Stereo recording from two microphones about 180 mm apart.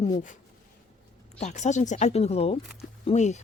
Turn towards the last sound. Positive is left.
turn(degrees=40)  # may be behind; listen again after turning